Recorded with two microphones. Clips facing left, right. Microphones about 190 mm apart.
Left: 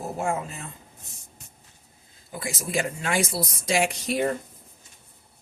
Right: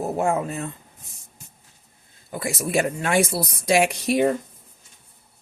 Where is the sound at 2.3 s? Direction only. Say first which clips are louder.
Right 5 dB; 60° right (ahead or behind).